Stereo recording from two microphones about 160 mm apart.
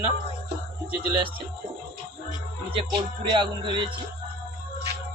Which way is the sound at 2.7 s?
30° right (ahead or behind).